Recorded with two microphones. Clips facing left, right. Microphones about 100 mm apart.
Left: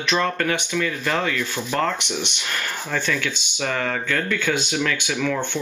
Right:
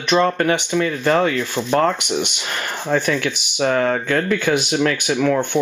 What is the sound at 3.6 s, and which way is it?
Speech, 35° right (ahead or behind).